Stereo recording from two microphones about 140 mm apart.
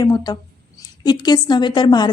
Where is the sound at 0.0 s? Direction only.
30° left (ahead or behind).